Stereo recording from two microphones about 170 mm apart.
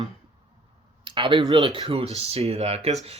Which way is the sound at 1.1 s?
30° right (ahead or behind).